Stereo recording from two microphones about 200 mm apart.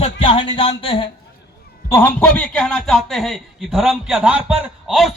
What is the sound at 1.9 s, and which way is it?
A man's voice, 10° left (ahead or behind).